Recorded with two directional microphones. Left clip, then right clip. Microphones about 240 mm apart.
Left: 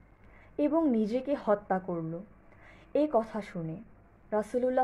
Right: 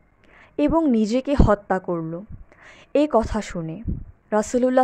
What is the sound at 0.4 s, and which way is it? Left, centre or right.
A woman's voice, right.